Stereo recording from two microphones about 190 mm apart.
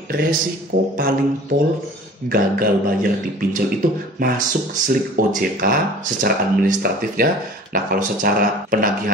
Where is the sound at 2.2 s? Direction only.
50° right (ahead or behind).